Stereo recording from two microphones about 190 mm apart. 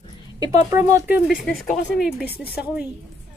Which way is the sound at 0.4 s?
15° right (ahead or behind).